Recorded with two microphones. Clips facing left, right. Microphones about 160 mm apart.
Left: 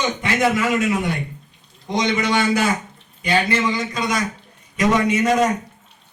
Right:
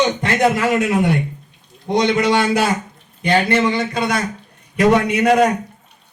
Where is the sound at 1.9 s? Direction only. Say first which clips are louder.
Right 5 dB; 55° right (ahead or behind).